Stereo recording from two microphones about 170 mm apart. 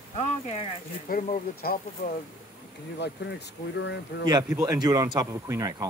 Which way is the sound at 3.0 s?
90° left.